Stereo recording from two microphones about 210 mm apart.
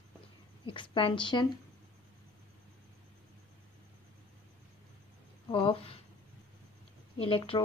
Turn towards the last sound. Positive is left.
turn(degrees=25)  # may be behind; listen again after turning